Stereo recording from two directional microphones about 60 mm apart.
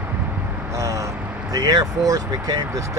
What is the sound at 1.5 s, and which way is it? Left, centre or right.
Speech, right.